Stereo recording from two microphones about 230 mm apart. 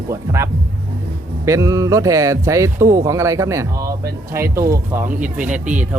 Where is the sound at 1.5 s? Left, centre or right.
Centre.